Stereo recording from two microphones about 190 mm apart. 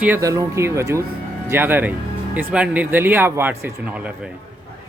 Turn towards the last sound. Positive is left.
turn(degrees=-10)  # may be behind; listen again after turning